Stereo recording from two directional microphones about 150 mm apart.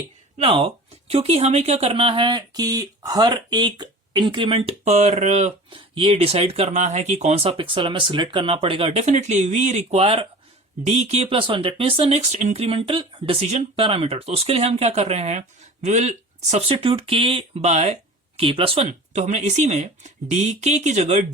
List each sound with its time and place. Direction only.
0.3 s speech: 40° right (ahead or behind)